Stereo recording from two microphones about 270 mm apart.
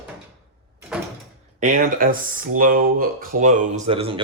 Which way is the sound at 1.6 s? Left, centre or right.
Right.